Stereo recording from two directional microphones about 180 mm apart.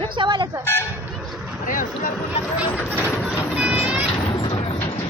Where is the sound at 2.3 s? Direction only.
10° right (ahead or behind).